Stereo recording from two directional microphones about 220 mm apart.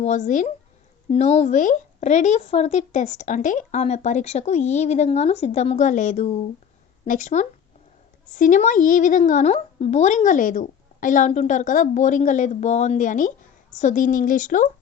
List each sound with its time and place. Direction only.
0.0 s speech: 35° left (ahead or behind)